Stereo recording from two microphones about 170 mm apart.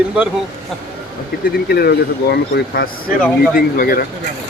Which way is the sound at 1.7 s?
65° left (ahead or behind).